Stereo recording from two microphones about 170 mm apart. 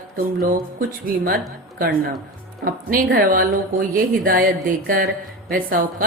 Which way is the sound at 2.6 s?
60° right (ahead or behind).